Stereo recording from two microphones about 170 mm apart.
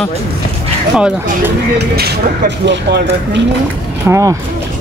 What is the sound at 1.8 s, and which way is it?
Speech, 75° right (ahead or behind).